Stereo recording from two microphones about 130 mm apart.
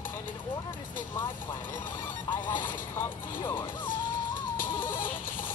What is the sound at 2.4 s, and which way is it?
Speech, 15° left (ahead or behind).